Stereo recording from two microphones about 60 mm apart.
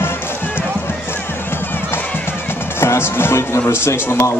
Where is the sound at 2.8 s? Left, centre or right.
Left.